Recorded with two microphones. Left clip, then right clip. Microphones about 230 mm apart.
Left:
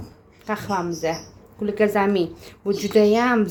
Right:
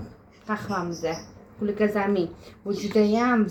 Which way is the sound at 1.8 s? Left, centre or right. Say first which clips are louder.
Left 5 dB; left.